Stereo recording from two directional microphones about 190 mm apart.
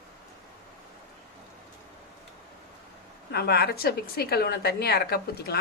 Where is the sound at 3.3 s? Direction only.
55° left (ahead or behind).